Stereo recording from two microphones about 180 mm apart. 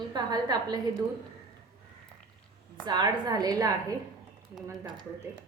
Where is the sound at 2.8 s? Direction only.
20° right (ahead or behind).